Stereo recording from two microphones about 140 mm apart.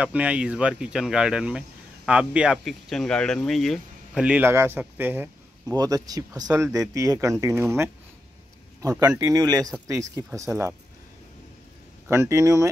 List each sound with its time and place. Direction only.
0.0 s speech: 10° right (ahead or behind)
5.8 s speech: 25° right (ahead or behind)
9.2 s speech: 25° right (ahead or behind)
12.1 s speech: 20° right (ahead or behind)